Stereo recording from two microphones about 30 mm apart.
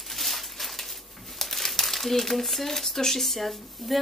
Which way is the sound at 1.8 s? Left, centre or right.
Centre.